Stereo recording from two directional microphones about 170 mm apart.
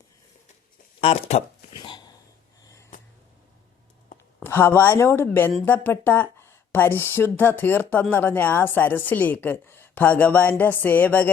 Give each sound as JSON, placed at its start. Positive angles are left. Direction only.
{"t": 1.0, "sound": "speech", "side_deg": 40}
{"t": 1.7, "sound": "dog", "side_deg": 25}
{"t": 4.4, "sound": "a woman's voice", "side_deg": 10}